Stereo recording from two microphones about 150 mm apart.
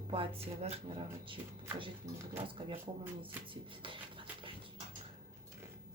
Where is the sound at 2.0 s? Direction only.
50° right (ahead or behind).